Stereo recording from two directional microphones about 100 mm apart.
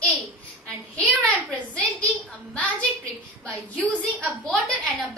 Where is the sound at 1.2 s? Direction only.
10° left (ahead or behind).